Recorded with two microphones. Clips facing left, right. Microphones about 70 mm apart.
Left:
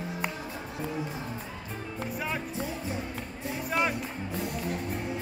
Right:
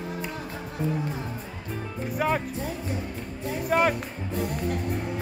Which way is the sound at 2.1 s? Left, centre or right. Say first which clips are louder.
Right 9 dB; right.